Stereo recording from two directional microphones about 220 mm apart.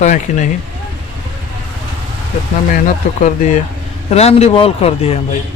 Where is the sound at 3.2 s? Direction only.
35° left (ahead or behind).